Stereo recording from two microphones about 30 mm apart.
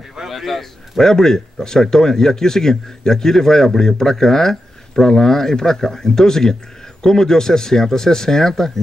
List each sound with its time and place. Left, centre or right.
0.3 s a man's voice: centre